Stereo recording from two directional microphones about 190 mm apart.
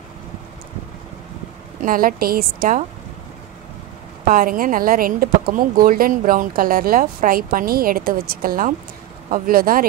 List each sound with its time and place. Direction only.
1.9 s speech: 50° right (ahead or behind)
4.3 s speech: 45° right (ahead or behind)